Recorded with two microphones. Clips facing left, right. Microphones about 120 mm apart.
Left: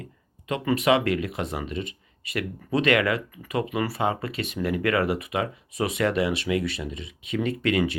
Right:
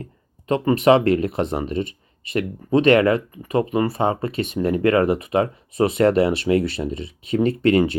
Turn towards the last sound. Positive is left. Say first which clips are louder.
# right 7 dB
turn(degrees=-30)  # may be behind; listen again after turning